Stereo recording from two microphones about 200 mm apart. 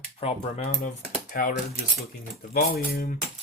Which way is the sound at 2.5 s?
45° left (ahead or behind).